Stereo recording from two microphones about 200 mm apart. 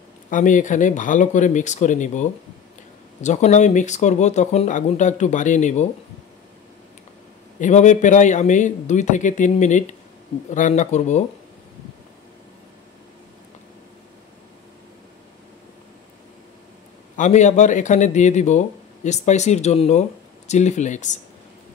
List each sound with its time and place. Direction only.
0.3 s speech: 40° left (ahead or behind)
7.6 s speech: 35° left (ahead or behind)
17.2 s speech: 35° left (ahead or behind)